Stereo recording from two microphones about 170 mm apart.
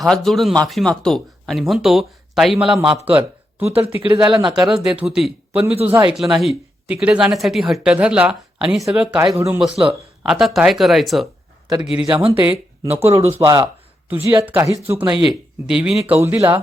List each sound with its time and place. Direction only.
0.0 s speech: centre (ahead or behind)
3.1 s a sound: 10° right (ahead or behind)
3.7 s speech: 35° right (ahead or behind)
4.0 s speech: 25° right (ahead or behind)
4.7 s speech: 5° right (ahead or behind)
9.1 s speech: 20° right (ahead or behind)
9.6 s speech: centre (ahead or behind)
12.4 s speech: 10° right (ahead or behind)
15.3 s speech: 5° right (ahead or behind)
16.2 s speech: 15° right (ahead or behind)